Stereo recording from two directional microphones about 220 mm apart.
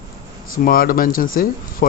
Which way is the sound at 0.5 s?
40° left (ahead or behind).